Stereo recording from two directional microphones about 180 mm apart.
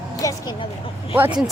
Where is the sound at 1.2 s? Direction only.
10° right (ahead or behind).